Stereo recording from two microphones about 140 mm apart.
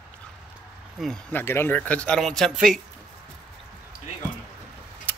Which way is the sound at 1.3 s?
15° left (ahead or behind).